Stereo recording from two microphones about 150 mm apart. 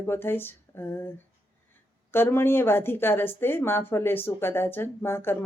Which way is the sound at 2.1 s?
15° left (ahead or behind).